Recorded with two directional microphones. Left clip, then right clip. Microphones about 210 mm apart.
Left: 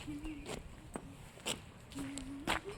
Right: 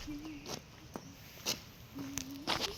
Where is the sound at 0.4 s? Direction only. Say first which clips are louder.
Right 1 dB; 5° left (ahead or behind).